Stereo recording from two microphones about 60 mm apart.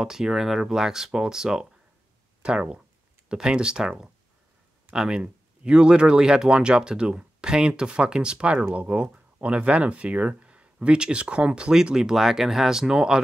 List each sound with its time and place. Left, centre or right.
0.0 s speech: centre